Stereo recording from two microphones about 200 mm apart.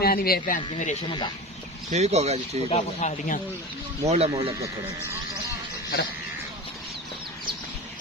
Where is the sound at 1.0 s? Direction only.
25° left (ahead or behind).